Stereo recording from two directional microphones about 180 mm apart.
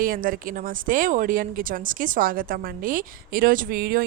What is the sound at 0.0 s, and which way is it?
A woman's voice, 50° right (ahead or behind).